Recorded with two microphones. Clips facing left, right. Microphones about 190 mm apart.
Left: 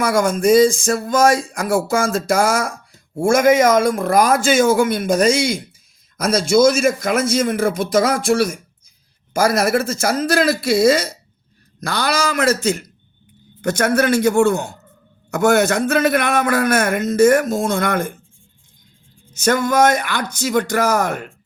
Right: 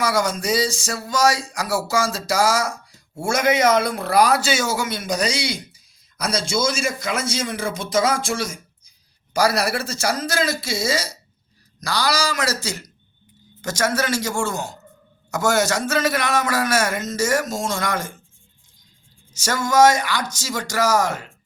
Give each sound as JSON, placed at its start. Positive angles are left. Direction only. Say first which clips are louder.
{"t": 0.0, "sound": "a man's voice", "louder": "left 6 dB", "side_deg": 50}
{"t": 19.3, "sound": "a man's voice", "louder": "left 5 dB", "side_deg": 55}